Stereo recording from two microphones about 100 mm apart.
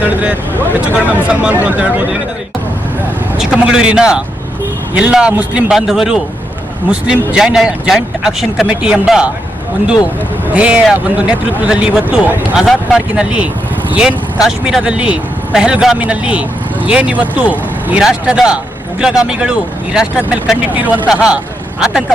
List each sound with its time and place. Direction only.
0.0 s speech: 15° right (ahead or behind)
3.3 s speech: 5° right (ahead or behind)
10.5 s speech: 10° right (ahead or behind)